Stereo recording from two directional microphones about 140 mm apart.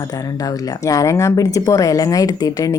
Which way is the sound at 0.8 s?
20° left (ahead or behind).